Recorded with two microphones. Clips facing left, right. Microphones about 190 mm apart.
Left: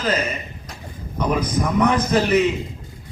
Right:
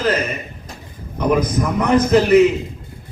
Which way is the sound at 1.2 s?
50° right (ahead or behind).